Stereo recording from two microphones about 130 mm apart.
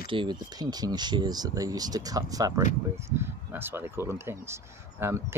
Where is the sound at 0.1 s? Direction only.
35° right (ahead or behind).